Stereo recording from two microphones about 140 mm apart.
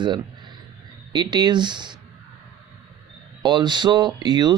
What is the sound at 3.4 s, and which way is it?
Speech, 30° right (ahead or behind).